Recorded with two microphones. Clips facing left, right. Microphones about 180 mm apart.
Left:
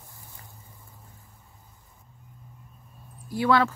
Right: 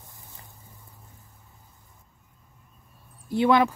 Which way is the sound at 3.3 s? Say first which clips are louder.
Right 2 dB; 20° right (ahead or behind).